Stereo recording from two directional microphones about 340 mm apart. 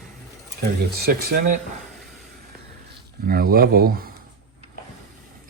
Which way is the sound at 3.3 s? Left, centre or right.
Right.